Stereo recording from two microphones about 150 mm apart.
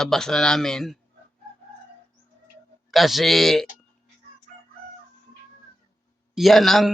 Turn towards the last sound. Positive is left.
turn(degrees=0)  # may be behind; listen again after turning